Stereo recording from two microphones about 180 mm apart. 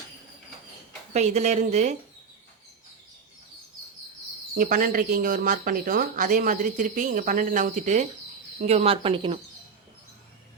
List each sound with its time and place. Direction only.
1.1 s speech: 40° right (ahead or behind)
4.5 s speech: 50° right (ahead or behind); by 9.4 s 30° right (ahead or behind)